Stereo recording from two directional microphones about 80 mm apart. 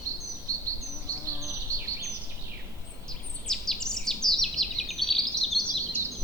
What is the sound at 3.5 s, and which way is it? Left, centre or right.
Bird vocalization, centre.